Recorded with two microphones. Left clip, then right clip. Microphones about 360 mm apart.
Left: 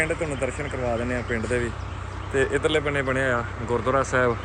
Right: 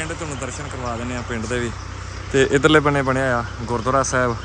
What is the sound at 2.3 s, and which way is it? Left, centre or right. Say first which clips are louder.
Speech: right 7 dB; right.